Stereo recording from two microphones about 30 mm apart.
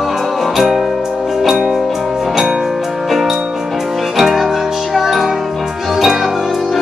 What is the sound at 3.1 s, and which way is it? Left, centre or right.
Music, centre.